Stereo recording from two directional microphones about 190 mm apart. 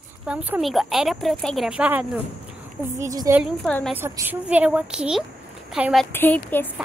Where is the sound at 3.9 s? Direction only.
10° right (ahead or behind).